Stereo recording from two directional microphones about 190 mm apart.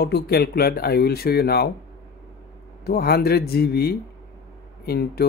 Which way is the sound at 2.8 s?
55° left (ahead or behind).